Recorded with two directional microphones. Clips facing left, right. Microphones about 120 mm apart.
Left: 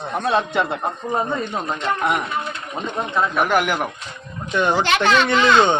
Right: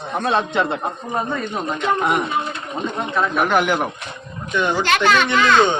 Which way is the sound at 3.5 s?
5° left (ahead or behind).